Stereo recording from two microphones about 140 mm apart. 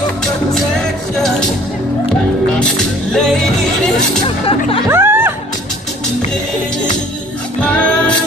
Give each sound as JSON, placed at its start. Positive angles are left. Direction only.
{"t": 0.7, "sound": "music", "side_deg": 5}
{"t": 2.6, "sound": "music", "side_deg": 5}
{"t": 4.5, "sound": "speech", "side_deg": 40}
{"t": 4.8, "sound": "speech", "side_deg": -15}
{"t": 7.6, "sound": "music", "side_deg": 10}